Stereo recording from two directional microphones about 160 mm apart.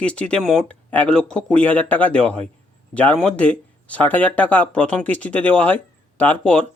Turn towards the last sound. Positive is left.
turn(degrees=10)  # may be behind; listen again after turning